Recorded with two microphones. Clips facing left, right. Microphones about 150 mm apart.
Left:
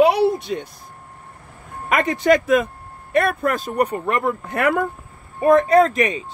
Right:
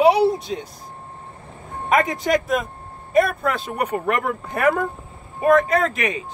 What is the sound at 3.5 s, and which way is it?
Speech, 45° left (ahead or behind).